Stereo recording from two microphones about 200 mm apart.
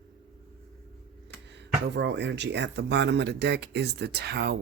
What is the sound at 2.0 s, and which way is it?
Speech, 60° right (ahead or behind).